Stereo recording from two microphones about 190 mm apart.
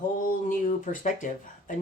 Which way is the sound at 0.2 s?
45° left (ahead or behind).